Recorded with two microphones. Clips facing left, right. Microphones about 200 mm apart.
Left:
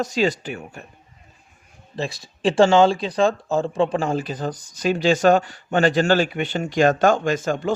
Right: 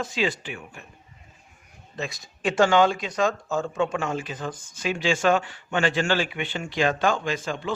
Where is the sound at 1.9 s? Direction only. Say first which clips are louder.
Left 5 dB; 30° left (ahead or behind).